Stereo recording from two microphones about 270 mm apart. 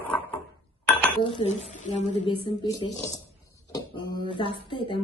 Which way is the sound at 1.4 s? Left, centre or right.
Left.